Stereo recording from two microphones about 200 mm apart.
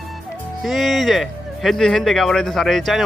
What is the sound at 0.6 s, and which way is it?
A man's voice, centre (ahead or behind).